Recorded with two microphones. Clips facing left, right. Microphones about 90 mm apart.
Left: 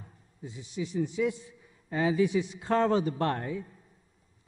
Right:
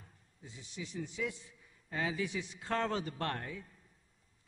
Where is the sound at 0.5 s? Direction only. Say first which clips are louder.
Left 10 dB; 10° left (ahead or behind).